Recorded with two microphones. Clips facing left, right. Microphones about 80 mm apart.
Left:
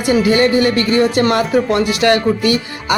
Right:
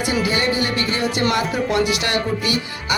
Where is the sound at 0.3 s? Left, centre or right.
Left.